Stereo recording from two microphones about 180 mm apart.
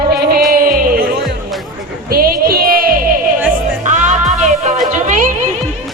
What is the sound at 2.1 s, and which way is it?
Music, 55° right (ahead or behind).